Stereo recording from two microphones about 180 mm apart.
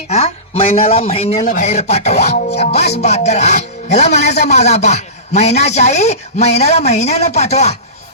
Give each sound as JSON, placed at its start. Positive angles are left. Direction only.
{"t": 0.1, "sound": "a man's voice", "side_deg": 35}